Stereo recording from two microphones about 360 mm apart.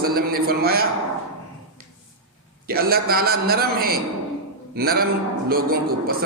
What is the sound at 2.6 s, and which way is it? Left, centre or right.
A man's voice, right.